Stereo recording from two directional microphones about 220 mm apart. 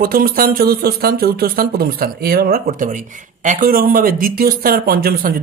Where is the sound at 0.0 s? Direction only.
40° right (ahead or behind).